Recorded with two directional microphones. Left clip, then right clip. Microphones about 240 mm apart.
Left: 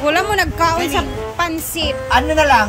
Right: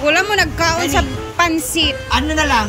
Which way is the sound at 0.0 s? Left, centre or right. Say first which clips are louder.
Right 1 dB; centre.